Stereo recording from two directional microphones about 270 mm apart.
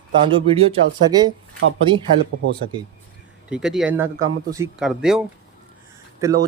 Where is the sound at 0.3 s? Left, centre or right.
Centre.